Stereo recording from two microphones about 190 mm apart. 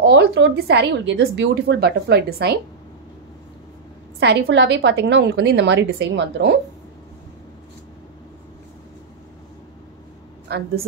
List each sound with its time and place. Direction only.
0.1 s a woman's voice: 65° right (ahead or behind)
4.2 s a woman's voice: 60° right (ahead or behind)